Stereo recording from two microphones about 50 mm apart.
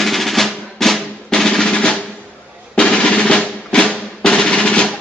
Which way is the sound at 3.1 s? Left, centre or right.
Left.